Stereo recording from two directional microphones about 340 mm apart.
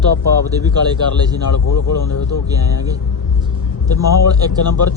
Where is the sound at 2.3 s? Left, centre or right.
Centre.